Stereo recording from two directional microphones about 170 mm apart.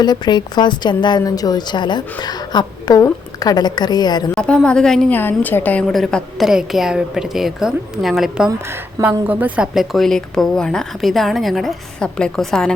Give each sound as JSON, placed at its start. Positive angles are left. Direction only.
{"t": 0.0, "sound": "a woman's voice", "side_deg": 25}
{"t": 4.4, "sound": "a woman's voice", "side_deg": 5}
{"t": 8.4, "sound": "a woman's voice", "side_deg": -15}